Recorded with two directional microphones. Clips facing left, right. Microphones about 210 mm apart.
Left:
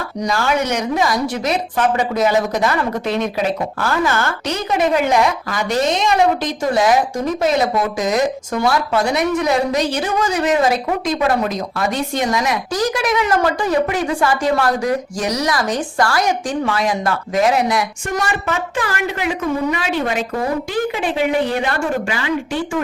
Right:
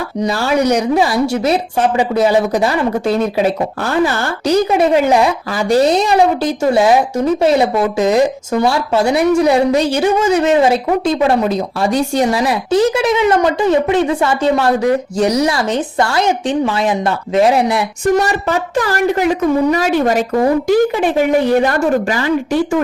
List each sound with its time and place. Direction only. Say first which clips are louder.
0.2 s a woman's voice: right 4 dB; 35° right (ahead or behind)
4.4 s a woman's voice: right 8 dB; 30° right (ahead or behind)